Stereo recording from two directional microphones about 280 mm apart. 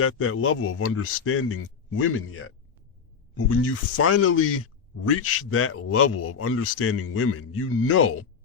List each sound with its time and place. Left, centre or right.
0.0 s speech: left